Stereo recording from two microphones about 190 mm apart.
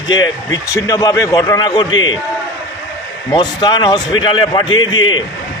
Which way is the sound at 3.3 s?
25° left (ahead or behind).